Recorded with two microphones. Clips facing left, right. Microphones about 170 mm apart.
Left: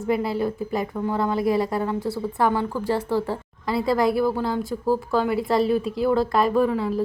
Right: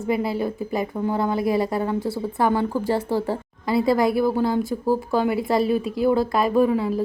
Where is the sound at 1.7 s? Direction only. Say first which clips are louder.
Right 1 dB; 25° right (ahead or behind).